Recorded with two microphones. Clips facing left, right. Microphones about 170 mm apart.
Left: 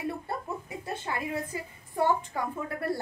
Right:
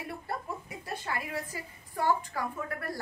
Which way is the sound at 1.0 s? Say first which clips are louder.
Left 3 dB; 20° left (ahead or behind).